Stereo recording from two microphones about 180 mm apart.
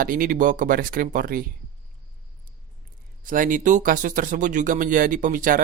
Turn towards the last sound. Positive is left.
turn(degrees=-50)  # may be behind; listen again after turning